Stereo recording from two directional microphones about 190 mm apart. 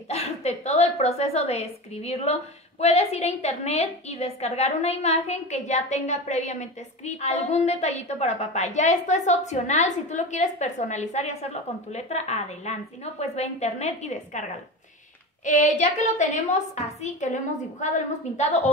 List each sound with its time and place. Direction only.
0.1 s a woman's voice: 35° left (ahead or behind)
15.4 s a woman's voice: 40° left (ahead or behind)